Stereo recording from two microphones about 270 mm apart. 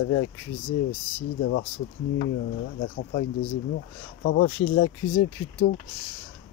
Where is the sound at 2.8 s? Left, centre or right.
Left.